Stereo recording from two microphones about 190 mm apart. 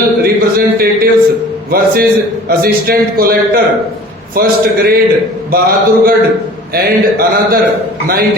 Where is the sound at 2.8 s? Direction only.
50° right (ahead or behind).